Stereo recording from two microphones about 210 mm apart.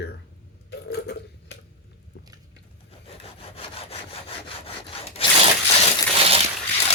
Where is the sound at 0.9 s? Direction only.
50° left (ahead or behind).